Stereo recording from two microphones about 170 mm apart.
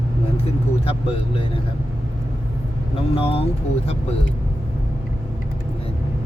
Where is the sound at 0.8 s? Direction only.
35° left (ahead or behind).